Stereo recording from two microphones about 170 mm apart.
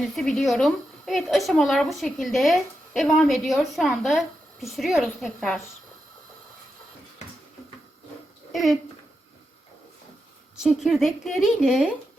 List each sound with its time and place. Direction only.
0.0 s a woman's voice: centre (ahead or behind)
8.5 s a woman's voice: centre (ahead or behind)
10.6 s a woman's voice: centre (ahead or behind)